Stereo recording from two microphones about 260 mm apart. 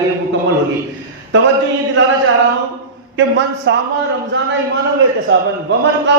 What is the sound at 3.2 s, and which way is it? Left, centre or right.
Speech, right.